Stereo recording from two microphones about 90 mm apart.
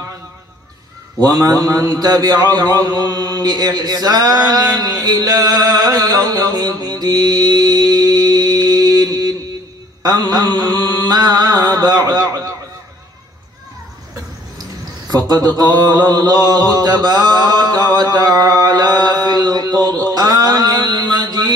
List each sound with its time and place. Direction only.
1.3 s a man's voice: 45° right (ahead or behind)
10.0 s mantra: 45° right (ahead or behind)
15.0 s mantra: 45° right (ahead or behind)